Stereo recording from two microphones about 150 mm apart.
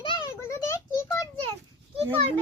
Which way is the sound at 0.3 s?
20° left (ahead or behind).